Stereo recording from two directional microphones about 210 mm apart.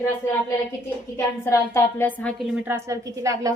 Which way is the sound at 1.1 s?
15° left (ahead or behind).